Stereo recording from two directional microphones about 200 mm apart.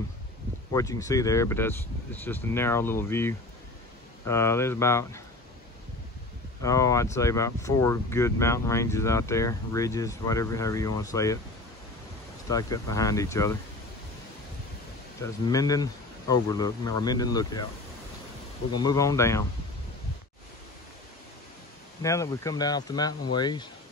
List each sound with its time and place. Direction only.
0.7 s speech: 15° left (ahead or behind)
6.6 s speech: 15° left (ahead or behind)
12.4 s speech: 15° left (ahead or behind)
15.4 s speech: 20° left (ahead or behind)
18.7 s speech: 20° left (ahead or behind)
22.0 s speech: 15° left (ahead or behind)